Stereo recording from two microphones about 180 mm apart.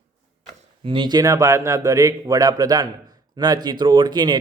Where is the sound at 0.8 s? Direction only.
25° right (ahead or behind).